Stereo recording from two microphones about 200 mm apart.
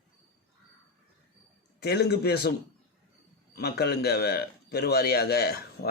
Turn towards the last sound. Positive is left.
turn(degrees=50)  # may be behind; listen again after turning